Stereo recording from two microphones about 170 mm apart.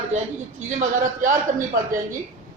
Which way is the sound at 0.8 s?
50° right (ahead or behind).